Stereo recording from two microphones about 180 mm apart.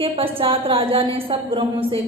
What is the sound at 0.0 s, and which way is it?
A woman's voice, 30° right (ahead or behind).